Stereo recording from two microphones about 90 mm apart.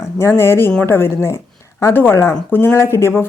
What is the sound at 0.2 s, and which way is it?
A woman's voice, 30° left (ahead or behind).